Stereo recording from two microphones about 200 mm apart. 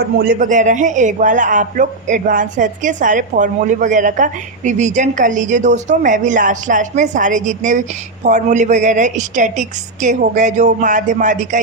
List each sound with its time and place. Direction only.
0.2 s a man's voice: 45° right (ahead or behind)